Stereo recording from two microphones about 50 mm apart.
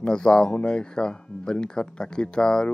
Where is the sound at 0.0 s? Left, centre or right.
Centre.